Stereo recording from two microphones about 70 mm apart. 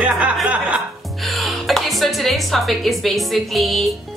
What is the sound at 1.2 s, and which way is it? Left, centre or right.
Speech, centre.